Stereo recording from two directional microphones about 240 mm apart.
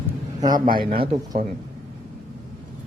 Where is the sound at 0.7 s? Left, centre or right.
Right.